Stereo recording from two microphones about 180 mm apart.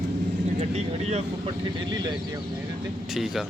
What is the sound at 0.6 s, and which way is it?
Speech, 40° right (ahead or behind).